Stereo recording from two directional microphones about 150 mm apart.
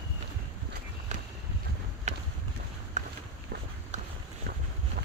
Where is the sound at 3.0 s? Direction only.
55° right (ahead or behind).